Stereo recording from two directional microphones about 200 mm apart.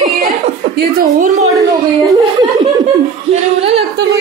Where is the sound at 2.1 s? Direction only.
20° right (ahead or behind).